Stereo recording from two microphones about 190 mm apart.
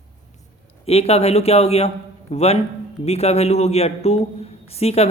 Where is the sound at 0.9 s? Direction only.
30° left (ahead or behind).